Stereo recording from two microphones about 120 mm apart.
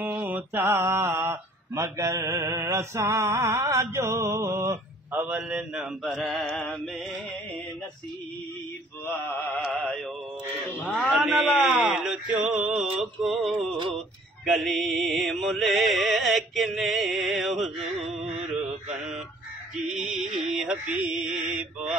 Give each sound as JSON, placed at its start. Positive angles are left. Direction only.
{"t": 0.0, "sound": "speech", "side_deg": -15}
{"t": 5.1, "sound": "mantra", "side_deg": -15}
{"t": 9.5, "sound": "music", "side_deg": 5}
{"t": 10.7, "sound": "speech", "side_deg": 10}
{"t": 11.0, "sound": "mantra", "side_deg": 0}
{"t": 18.9, "sound": "fowl", "side_deg": 0}
{"t": 19.7, "sound": "a sound", "side_deg": -5}
{"t": 20.3, "sound": "mantra", "side_deg": -5}